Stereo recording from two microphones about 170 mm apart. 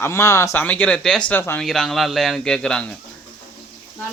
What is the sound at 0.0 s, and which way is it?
Speech, 15° left (ahead or behind).